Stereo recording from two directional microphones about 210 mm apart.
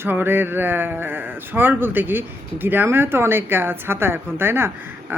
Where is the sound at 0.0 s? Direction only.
10° right (ahead or behind).